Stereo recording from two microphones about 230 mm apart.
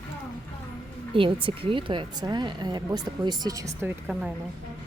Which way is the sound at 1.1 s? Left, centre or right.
Right.